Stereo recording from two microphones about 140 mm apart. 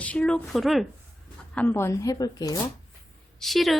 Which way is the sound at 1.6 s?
15° left (ahead or behind).